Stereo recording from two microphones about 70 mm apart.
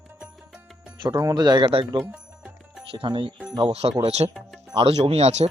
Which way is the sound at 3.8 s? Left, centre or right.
Right.